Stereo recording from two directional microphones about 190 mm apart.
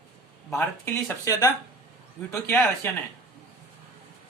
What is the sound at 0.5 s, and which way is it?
Speech, 10° left (ahead or behind).